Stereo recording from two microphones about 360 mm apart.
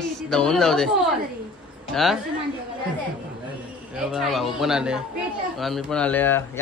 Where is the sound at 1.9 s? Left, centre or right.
Centre.